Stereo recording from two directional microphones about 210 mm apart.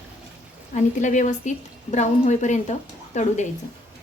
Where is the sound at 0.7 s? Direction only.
35° left (ahead or behind).